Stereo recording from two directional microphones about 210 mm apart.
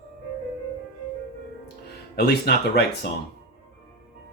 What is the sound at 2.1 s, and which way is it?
Speech, 50° left (ahead or behind).